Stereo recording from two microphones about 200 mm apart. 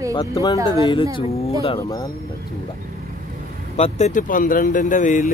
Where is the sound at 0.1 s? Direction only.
20° left (ahead or behind).